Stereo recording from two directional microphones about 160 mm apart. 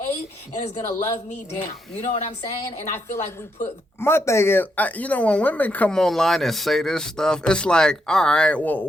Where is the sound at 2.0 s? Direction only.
45° left (ahead or behind).